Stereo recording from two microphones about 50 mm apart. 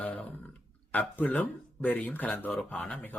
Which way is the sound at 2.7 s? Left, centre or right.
Left.